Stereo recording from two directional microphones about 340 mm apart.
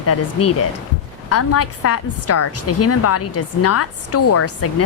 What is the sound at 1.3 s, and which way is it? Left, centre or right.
A woman's voice, left.